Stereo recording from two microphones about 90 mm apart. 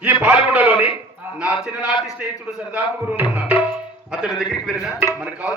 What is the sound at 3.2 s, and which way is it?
A man's voice, 15° right (ahead or behind).